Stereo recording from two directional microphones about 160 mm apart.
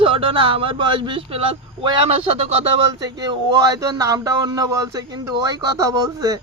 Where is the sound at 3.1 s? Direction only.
25° right (ahead or behind).